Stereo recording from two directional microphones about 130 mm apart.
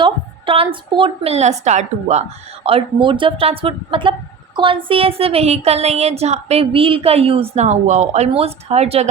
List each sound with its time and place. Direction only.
0.0 s a woman's voice: 45° right (ahead or behind)
1.3 s a woman's voice: 60° right (ahead or behind)
2.6 s a woman's voice: 45° right (ahead or behind)